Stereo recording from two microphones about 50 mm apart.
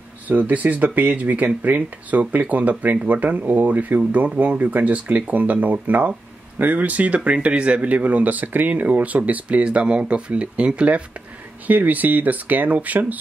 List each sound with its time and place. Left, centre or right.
0.3 s speech: right
11.6 s speech: right